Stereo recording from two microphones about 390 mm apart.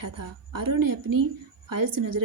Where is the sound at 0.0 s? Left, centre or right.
Right.